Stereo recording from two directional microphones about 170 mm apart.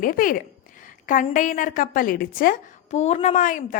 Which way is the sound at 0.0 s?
55° left (ahead or behind).